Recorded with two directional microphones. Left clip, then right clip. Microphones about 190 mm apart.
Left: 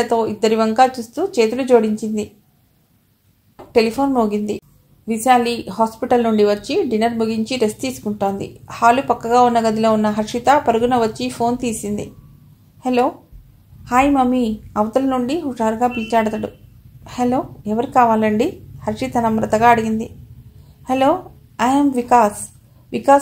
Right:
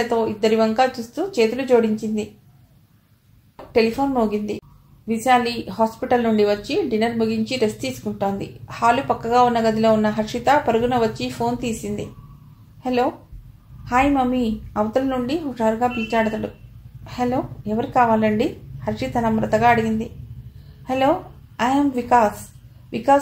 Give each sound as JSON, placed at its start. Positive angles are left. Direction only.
{"t": 0.0, "sound": "a woman's voice", "side_deg": 35}
{"t": 3.7, "sound": "a woman's voice", "side_deg": 35}